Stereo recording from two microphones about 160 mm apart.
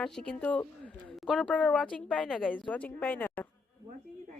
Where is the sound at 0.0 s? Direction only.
5° left (ahead or behind).